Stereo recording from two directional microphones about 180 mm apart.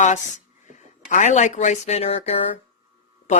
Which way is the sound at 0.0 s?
40° left (ahead or behind).